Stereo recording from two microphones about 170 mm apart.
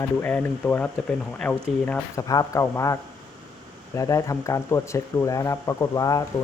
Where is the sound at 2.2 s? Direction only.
20° left (ahead or behind).